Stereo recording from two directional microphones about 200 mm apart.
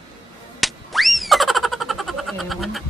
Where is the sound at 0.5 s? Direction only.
Centre (ahead or behind).